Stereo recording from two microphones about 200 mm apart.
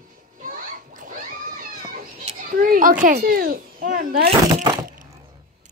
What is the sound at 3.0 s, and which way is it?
A child's voice, 45° right (ahead or behind).